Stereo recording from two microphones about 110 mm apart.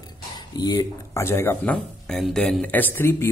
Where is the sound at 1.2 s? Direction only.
20° left (ahead or behind).